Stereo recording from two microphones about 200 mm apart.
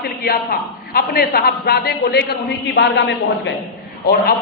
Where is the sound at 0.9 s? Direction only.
50° left (ahead or behind).